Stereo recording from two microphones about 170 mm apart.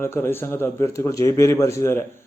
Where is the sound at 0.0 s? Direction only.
15° left (ahead or behind).